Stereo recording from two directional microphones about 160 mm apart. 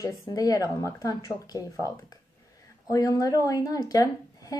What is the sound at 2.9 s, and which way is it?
A woman's voice, 20° left (ahead or behind).